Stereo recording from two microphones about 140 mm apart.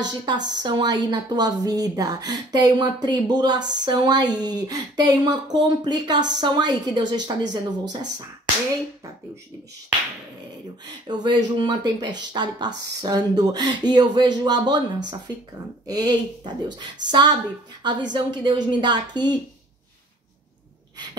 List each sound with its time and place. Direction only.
0.2 s a woman's voice: 30° right (ahead or behind)
10.9 s a woman's voice: 30° right (ahead or behind)